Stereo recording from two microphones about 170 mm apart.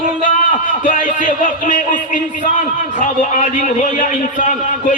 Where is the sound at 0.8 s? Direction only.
50° left (ahead or behind).